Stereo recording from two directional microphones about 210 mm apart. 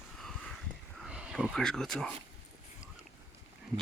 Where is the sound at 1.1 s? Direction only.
5° right (ahead or behind).